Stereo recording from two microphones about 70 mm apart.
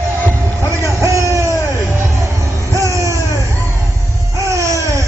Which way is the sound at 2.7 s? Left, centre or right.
Right.